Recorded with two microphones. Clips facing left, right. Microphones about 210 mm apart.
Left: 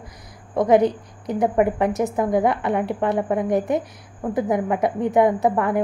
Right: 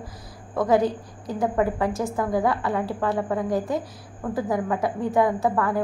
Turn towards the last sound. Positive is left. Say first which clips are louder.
# left 3 dB
turn(degrees=20)  # may be behind; listen again after turning